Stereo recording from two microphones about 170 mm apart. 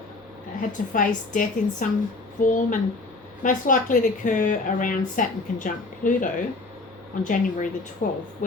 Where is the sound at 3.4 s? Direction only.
50° left (ahead or behind).